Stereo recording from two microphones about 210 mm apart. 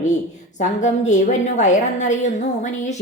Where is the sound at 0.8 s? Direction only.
35° left (ahead or behind).